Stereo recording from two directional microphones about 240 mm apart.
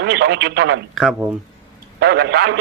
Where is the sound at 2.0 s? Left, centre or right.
Right.